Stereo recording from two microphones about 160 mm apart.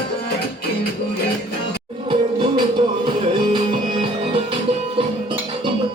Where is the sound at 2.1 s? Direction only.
30° right (ahead or behind).